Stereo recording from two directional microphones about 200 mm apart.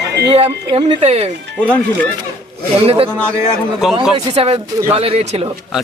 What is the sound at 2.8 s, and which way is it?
Speech, 30° right (ahead or behind).